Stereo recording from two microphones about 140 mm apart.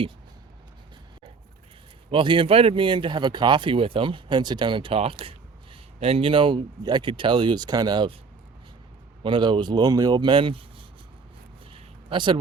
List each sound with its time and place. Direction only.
2.0 s speech: 40° right (ahead or behind)
9.2 s speech: 35° right (ahead or behind)
11.7 s a sound: 35° right (ahead or behind)